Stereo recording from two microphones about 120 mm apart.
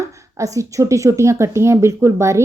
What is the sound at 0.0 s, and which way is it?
A woman's voice, 25° right (ahead or behind).